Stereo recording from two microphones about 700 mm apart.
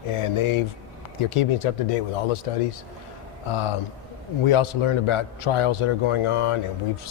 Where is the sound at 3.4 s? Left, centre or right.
Left.